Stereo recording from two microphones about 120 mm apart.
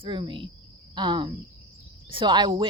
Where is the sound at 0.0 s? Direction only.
40° right (ahead or behind).